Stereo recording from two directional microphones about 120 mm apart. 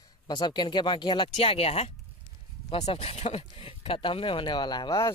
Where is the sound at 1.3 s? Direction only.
55° left (ahead or behind).